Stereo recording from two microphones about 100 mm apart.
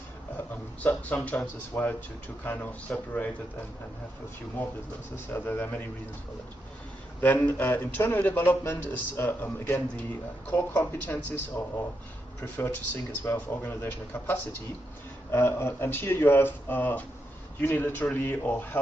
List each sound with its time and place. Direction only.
0.5 s speech: 20° left (ahead or behind)
4.6 s a man's voice: 20° left (ahead or behind)
7.2 s a man's voice: 20° left (ahead or behind)